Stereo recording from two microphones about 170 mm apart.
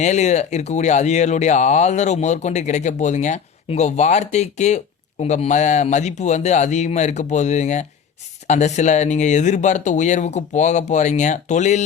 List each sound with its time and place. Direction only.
0.0 s speech: 45° left (ahead or behind)